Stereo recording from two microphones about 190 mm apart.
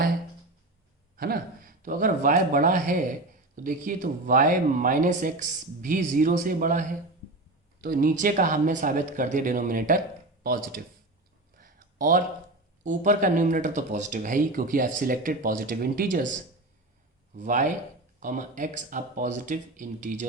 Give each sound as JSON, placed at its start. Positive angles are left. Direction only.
{"t": 1.1, "sound": "speech", "side_deg": -50}
{"t": 11.5, "sound": "a sound", "side_deg": -45}
{"t": 12.8, "sound": "speech", "side_deg": -40}
{"t": 17.3, "sound": "speech", "side_deg": -45}